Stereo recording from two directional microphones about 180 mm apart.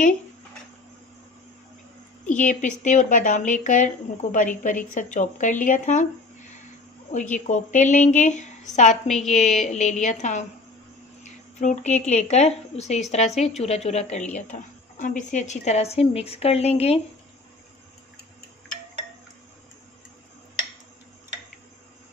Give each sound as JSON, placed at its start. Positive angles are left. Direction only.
{"t": 2.2, "sound": "a woman's voice", "side_deg": 45}
{"t": 7.1, "sound": "a woman's voice", "side_deg": 45}
{"t": 11.2, "sound": "a sound", "side_deg": 40}
{"t": 12.1, "sound": "a woman's voice", "side_deg": 40}